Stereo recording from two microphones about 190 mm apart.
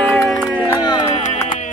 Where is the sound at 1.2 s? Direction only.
40° left (ahead or behind).